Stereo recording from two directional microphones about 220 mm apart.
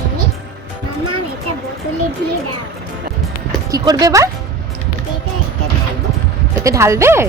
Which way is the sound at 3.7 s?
15° right (ahead or behind).